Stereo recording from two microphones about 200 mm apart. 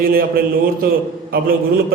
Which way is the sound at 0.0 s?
45° right (ahead or behind).